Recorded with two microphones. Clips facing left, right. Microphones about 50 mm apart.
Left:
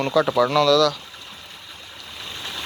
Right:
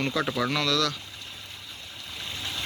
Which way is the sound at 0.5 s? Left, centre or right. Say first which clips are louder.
Left 11 dB; right.